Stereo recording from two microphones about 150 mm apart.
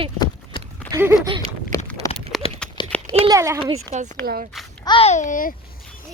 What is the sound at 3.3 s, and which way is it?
Speech, 20° right (ahead or behind).